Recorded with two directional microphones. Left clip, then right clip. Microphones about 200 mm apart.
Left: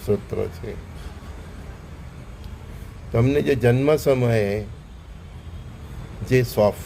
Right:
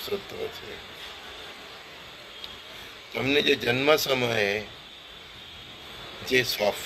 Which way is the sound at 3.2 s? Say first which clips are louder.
Left 2 dB; 20° left (ahead or behind).